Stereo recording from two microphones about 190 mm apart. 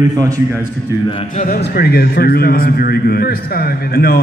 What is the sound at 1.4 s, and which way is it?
A man's voice, 55° left (ahead or behind).